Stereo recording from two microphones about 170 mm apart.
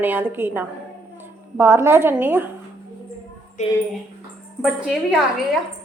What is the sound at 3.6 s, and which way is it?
Speech, 45° left (ahead or behind).